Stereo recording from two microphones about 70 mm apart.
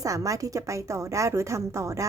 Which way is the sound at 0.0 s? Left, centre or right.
Right.